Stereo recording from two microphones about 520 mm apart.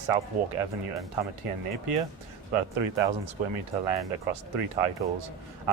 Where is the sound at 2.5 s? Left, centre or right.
Right.